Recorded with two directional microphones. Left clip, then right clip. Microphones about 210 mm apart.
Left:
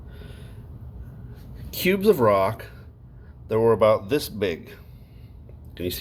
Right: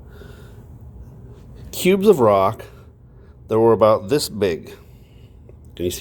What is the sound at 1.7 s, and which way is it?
Speech, 25° right (ahead or behind).